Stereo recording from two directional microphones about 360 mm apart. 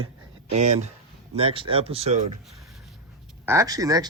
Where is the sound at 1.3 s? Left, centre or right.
Centre.